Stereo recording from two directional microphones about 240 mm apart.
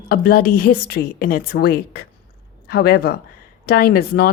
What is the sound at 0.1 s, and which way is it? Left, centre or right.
Speech, left.